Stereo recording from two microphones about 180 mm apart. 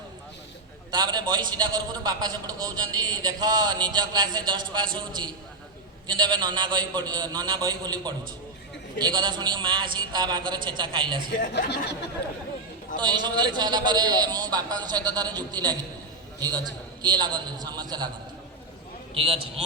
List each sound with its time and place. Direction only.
0.9 s a man's voice: 25° right (ahead or behind)
11.3 s speech: 60° left (ahead or behind)
13.0 s a man's voice: 25° right (ahead or behind)
17.0 s a man's voice: 25° right (ahead or behind)
19.1 s a man's voice: 30° right (ahead or behind)